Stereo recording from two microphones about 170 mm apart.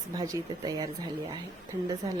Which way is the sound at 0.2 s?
20° right (ahead or behind).